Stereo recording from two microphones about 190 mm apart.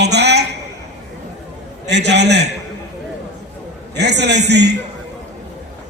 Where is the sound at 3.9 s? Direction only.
65° right (ahead or behind).